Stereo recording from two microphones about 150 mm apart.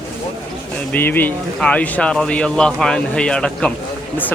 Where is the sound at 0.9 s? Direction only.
15° left (ahead or behind).